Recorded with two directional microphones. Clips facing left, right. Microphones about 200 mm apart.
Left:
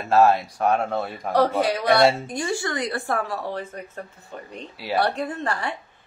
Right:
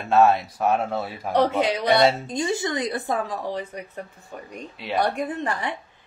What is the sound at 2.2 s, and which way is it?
Speech, 20° right (ahead or behind).